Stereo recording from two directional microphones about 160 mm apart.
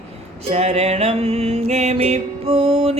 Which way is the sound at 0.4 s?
40° right (ahead or behind).